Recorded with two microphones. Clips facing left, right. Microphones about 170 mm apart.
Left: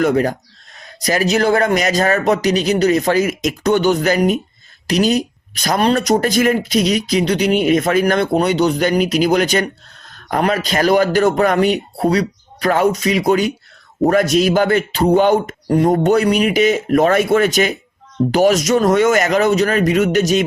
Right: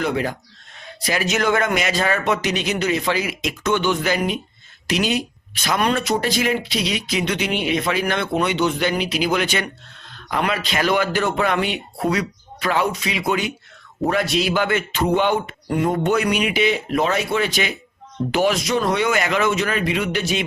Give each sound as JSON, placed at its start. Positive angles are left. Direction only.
{"t": 0.0, "sound": "speech", "side_deg": 45}